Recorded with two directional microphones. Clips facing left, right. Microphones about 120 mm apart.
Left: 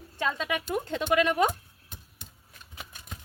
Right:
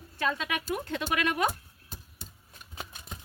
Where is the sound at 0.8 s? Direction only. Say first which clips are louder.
Left 8 dB; 25° left (ahead or behind).